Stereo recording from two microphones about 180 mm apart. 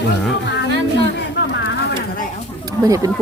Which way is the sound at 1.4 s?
80° left.